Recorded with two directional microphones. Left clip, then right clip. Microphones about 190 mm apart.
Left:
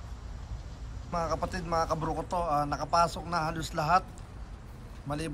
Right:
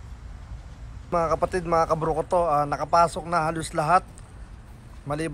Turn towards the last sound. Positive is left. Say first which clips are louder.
# right 6 dB
turn(degrees=10)  # may be behind; listen again after turning